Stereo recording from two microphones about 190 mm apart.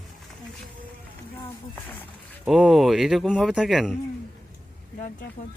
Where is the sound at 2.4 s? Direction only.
Centre (ahead or behind).